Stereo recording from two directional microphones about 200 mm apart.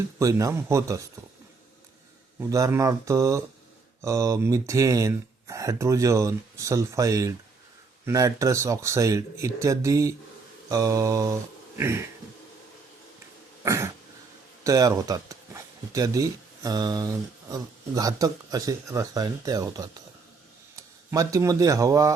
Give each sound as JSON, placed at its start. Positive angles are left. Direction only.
{"t": 0.2, "sound": "speech", "side_deg": -15}
{"t": 2.5, "sound": "speech", "side_deg": -15}
{"t": 13.7, "sound": "speech", "side_deg": -15}